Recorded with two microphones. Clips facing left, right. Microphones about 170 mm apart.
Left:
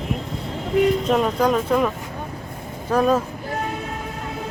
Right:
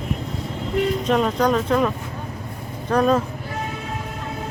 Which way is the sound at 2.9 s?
5° left (ahead or behind).